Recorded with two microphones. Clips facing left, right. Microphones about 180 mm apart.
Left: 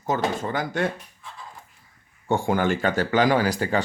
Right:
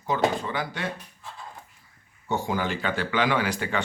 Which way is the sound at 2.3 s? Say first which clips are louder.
Left 5 dB; 50° left (ahead or behind).